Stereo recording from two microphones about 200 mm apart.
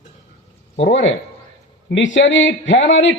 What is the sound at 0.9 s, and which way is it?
A man's voice, 65° left (ahead or behind).